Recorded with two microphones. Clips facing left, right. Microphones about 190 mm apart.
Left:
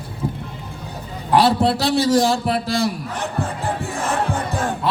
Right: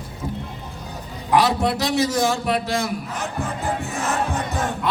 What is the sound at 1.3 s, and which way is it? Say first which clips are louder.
A man's voice: left 3 dB; 30° left (ahead or behind).